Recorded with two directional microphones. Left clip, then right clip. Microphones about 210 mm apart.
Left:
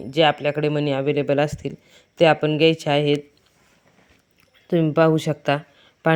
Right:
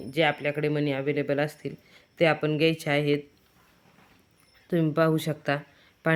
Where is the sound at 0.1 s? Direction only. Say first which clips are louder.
Left 7 dB; 25° left (ahead or behind).